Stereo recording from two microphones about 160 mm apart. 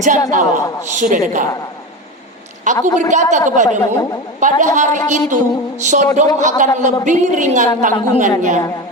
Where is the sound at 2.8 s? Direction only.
50° right (ahead or behind).